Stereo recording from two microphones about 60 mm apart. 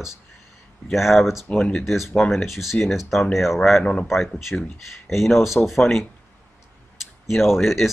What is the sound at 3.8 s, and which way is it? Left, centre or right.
Speech, centre.